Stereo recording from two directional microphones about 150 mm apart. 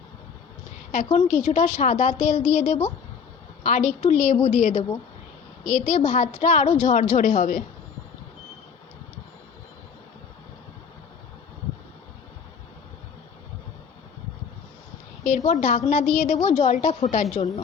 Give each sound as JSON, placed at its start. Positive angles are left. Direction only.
{"t": 0.9, "sound": "a woman's voice", "side_deg": 50}
{"t": 15.2, "sound": "a woman's voice", "side_deg": 55}